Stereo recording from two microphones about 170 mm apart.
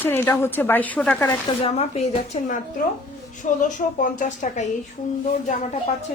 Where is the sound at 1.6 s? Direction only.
40° left (ahead or behind).